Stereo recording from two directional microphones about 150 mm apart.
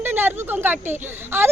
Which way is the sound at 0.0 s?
15° right (ahead or behind).